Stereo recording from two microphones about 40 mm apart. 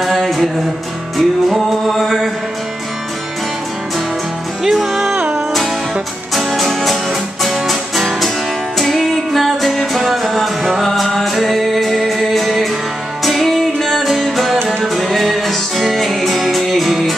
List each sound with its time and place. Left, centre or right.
0.0 s music: centre
4.6 s music: centre
5.1 s music: right
6.3 s music: centre